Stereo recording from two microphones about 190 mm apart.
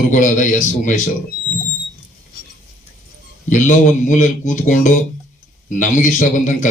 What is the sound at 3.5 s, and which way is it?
A man's voice, 40° left (ahead or behind).